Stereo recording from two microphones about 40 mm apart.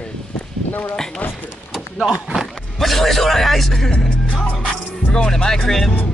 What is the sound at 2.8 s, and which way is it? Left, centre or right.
A man's voice, centre.